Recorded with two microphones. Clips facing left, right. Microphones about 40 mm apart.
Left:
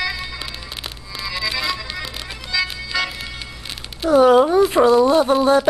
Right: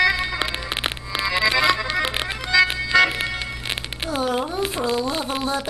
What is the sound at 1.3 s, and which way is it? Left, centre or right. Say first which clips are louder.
Accordion: right 5 dB; right.